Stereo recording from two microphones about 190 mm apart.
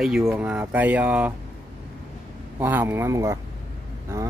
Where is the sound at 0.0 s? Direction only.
5° right (ahead or behind).